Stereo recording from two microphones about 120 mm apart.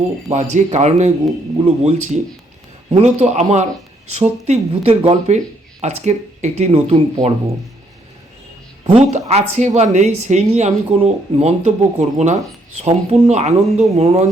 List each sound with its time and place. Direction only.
0.3 s speech: 70° right (ahead or behind)
5.8 s speech: 70° right (ahead or behind)
9.0 s speech: 65° right (ahead or behind)
12.8 s speech: 65° right (ahead or behind)